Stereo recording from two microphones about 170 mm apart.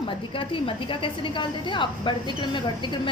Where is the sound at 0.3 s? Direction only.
30° left (ahead or behind).